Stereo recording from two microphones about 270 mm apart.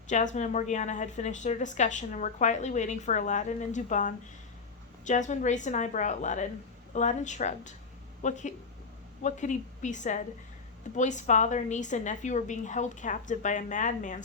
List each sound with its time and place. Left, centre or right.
0.1 s a woman's voice: left